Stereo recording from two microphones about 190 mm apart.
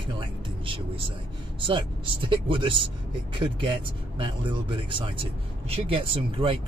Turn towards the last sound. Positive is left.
turn(degrees=-30)  # may be behind; listen again after turning